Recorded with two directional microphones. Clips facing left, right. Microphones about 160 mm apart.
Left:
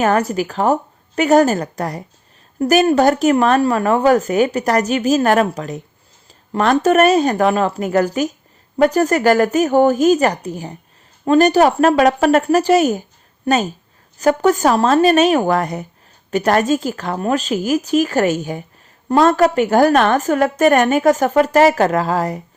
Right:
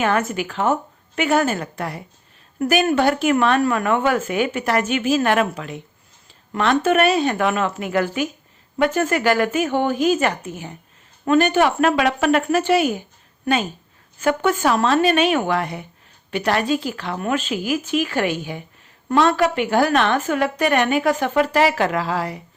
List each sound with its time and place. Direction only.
0.0 s a woman's voice: 40° left (ahead or behind)